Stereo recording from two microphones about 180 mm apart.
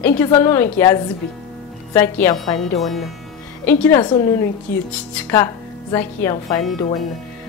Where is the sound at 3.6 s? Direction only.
10° left (ahead or behind).